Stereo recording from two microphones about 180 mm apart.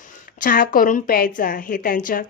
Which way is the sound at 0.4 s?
50° left (ahead or behind).